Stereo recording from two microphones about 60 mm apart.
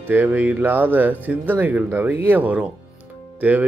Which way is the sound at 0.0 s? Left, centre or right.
Right.